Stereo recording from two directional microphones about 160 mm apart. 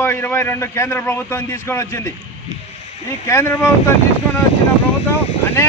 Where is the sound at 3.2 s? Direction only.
15° left (ahead or behind).